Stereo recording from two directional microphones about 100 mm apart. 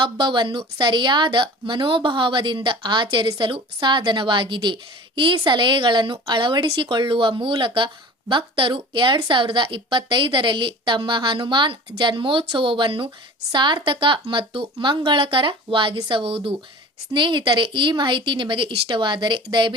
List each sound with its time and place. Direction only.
0.0 s a woman's voice: 55° right (ahead or behind)
17.1 s a woman's voice: 50° right (ahead or behind)